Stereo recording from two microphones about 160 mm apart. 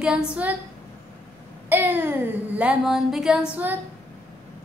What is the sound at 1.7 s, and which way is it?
Speech, 10° right (ahead or behind).